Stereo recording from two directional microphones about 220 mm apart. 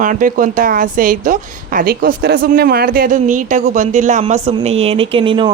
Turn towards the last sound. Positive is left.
turn(degrees=-20)  # may be behind; listen again after turning